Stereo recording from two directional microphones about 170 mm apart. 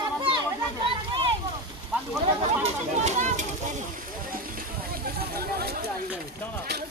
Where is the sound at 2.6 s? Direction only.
40° right (ahead or behind).